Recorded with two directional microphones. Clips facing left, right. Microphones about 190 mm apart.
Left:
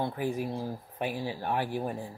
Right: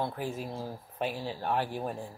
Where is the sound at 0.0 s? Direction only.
15° left (ahead or behind).